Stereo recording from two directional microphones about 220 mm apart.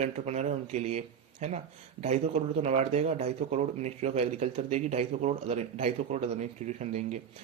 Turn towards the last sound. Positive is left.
turn(degrees=-30)  # may be behind; listen again after turning